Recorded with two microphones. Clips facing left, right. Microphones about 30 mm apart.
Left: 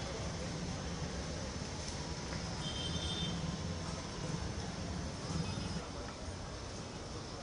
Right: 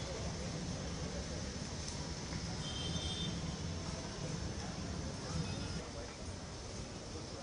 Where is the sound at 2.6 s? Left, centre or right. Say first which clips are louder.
Left 2 dB; centre.